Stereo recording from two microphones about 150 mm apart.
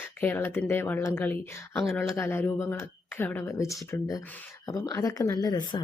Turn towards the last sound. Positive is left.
turn(degrees=30)  # may be behind; listen again after turning